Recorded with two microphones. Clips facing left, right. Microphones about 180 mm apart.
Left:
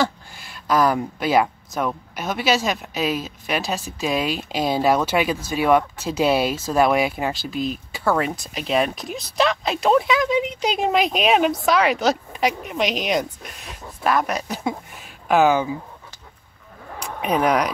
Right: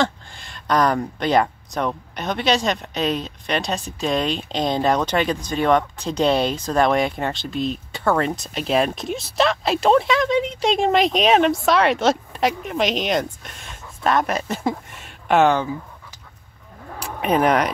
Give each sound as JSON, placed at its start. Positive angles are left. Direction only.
{"t": 0.0, "sound": "speech", "side_deg": 5}
{"t": 17.0, "sound": "speech", "side_deg": 0}